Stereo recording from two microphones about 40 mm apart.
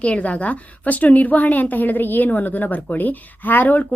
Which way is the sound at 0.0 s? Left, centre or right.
Left.